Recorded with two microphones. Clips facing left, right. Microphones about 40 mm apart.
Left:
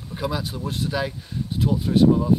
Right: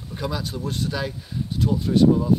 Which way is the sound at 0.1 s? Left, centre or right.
Centre.